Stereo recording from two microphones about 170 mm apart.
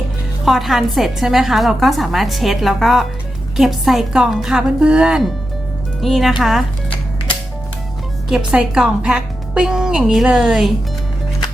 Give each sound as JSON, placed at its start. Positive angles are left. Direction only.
{"t": 0.4, "sound": "a woman's voice", "side_deg": 0}
{"t": 8.3, "sound": "a woman's voice", "side_deg": -5}